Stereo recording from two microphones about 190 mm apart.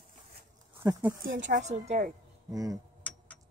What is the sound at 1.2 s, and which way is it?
Speech, 80° right.